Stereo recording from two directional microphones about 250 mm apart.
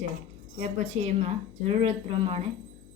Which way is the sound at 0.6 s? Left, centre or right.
Right.